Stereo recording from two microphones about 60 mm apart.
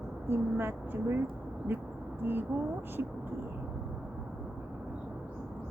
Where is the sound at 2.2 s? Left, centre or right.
Right.